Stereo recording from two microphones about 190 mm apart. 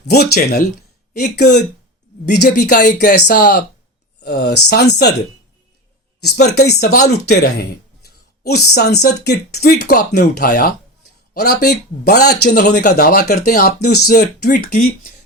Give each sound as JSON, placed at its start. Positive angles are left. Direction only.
{"t": 0.1, "sound": "speech", "side_deg": 55}
{"t": 2.6, "sound": "speech", "side_deg": 40}
{"t": 4.2, "sound": "speech", "side_deg": 60}
{"t": 6.3, "sound": "speech", "side_deg": 60}
{"t": 11.6, "sound": "speech", "side_deg": 60}
{"t": 12.5, "sound": "speech", "side_deg": 40}
{"t": 14.5, "sound": "speech", "side_deg": 45}